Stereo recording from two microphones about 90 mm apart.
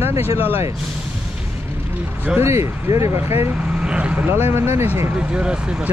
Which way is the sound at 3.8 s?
10° right (ahead or behind).